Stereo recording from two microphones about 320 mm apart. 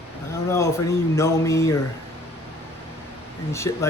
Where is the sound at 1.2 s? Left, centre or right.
Centre.